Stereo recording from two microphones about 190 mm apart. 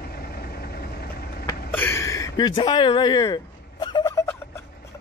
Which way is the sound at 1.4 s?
10° left (ahead or behind).